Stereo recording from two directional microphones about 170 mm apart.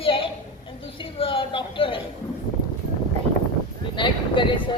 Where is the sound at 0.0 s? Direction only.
30° left (ahead or behind).